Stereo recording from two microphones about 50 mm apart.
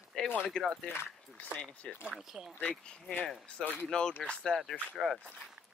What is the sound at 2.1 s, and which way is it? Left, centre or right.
Speech, centre.